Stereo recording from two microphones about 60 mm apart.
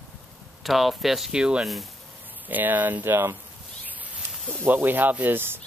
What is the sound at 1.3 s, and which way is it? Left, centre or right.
Speech, centre.